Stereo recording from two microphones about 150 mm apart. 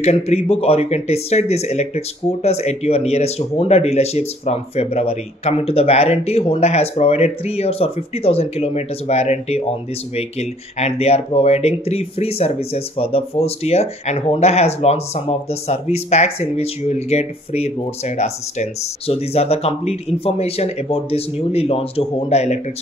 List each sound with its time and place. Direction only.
0.0 s speech: 45° left (ahead or behind)